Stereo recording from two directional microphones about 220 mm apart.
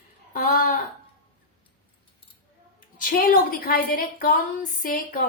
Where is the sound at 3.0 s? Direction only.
40° left (ahead or behind).